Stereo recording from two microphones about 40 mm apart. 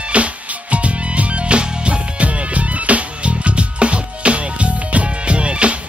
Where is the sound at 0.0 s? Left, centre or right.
Right.